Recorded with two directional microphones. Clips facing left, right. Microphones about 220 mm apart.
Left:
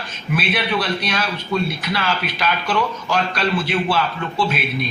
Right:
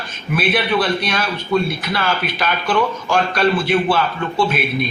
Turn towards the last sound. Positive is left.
turn(degrees=-50)  # may be behind; listen again after turning